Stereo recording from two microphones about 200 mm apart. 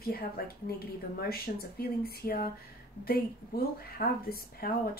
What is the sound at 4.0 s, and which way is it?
Speech, 50° left (ahead or behind).